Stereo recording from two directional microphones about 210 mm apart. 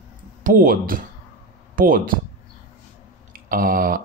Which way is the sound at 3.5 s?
40° right (ahead or behind).